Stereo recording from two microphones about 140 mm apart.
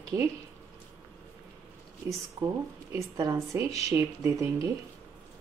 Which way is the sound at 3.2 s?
25° right (ahead or behind).